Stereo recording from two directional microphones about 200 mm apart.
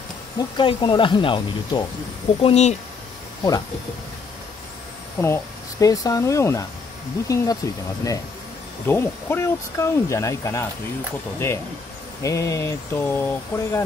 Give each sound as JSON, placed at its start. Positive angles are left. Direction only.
{"t": 0.6, "sound": "speech", "side_deg": 25}
{"t": 5.2, "sound": "speech", "side_deg": 15}